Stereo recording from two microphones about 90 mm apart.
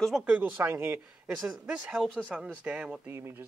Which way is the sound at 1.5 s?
10° right (ahead or behind).